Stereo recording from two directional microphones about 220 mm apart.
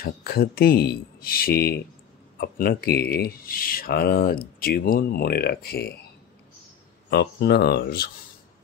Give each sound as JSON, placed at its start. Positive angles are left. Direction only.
{"t": 0.0, "sound": "speech", "side_deg": 45}
{"t": 7.1, "sound": "speech", "side_deg": 45}